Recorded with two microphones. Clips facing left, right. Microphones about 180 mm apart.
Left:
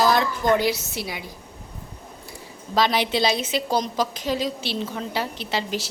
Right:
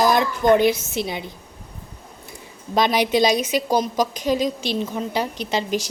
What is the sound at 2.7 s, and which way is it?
A woman's voice, 20° right (ahead or behind).